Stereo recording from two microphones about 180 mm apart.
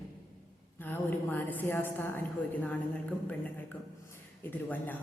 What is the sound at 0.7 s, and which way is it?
A woman's voice, 10° left (ahead or behind).